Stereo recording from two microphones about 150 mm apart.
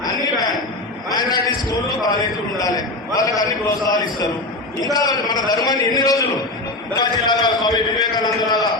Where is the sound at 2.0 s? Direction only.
25° left (ahead or behind).